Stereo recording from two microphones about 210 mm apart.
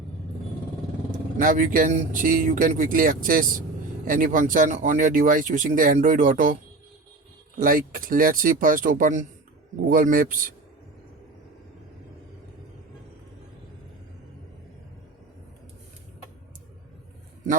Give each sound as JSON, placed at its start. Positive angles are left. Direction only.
{"t": 1.4, "sound": "speech", "side_deg": -40}